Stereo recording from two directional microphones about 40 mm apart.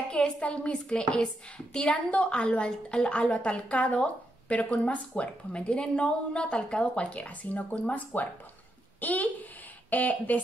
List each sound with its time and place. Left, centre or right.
0.1 s speech: left
2.0 s a woman's voice: left